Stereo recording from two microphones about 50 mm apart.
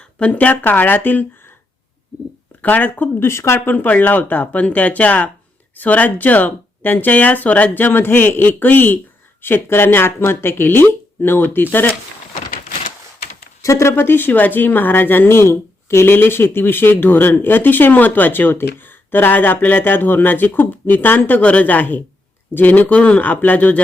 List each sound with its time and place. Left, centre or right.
0.2 s speech: left
0.5 s speech: left
2.6 s speech: left
3.2 s speech: left
3.7 s speech: left
13.6 s speech: left
13.9 s speech: left
16.1 s speech: left
21.4 s speech: left